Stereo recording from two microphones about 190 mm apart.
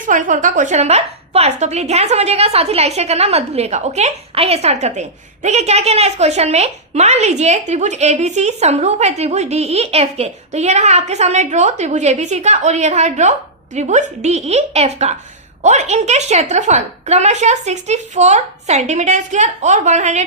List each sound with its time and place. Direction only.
0.0 s a woman's voice: 45° right (ahead or behind)